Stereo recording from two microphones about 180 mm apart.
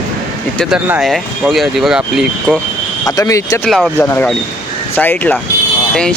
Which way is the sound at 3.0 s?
20° left (ahead or behind).